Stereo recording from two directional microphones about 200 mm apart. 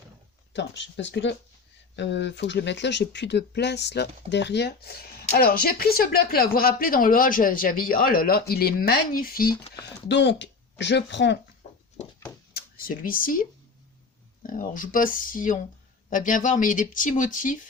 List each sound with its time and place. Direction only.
0.5 s speech: 60° left (ahead or behind)
5.3 s speech: 45° left (ahead or behind)
10.1 s speech: 60° left (ahead or behind)
11.6 s a sound: 30° left (ahead or behind)
12.5 s speech: 45° left (ahead or behind)